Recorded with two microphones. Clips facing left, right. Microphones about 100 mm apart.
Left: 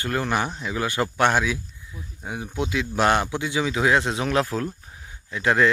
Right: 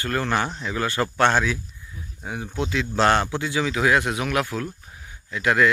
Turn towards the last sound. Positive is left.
turn(degrees=25)  # may be behind; listen again after turning